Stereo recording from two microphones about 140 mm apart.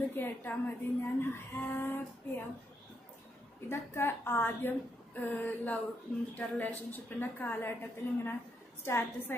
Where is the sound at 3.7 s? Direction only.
15° left (ahead or behind).